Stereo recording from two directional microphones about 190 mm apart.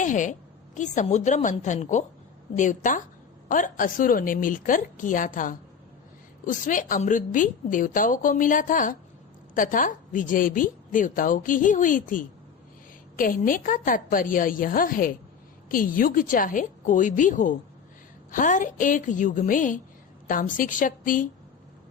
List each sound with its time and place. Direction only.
0.0 s a woman's voice: 40° left (ahead or behind)